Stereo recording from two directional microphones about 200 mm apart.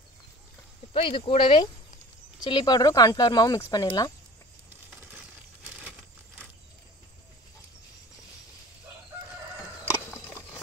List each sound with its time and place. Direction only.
0.9 s speech: 25° left (ahead or behind)